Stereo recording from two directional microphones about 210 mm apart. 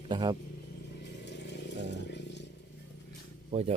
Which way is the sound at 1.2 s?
55° left (ahead or behind).